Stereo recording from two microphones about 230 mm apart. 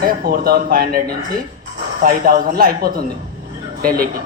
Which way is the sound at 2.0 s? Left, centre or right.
Right.